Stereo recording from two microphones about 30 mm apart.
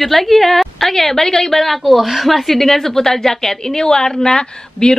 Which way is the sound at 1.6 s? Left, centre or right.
Centre.